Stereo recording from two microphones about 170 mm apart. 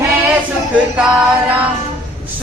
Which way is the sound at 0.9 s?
5° right (ahead or behind).